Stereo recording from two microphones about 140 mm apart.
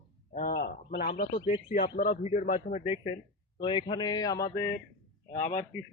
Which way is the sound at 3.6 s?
35° left (ahead or behind).